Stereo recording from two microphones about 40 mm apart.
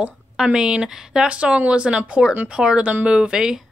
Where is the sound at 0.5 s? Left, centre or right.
Centre.